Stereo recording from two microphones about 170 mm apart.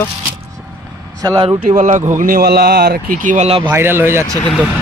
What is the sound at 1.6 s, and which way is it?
Speech, 50° right (ahead or behind).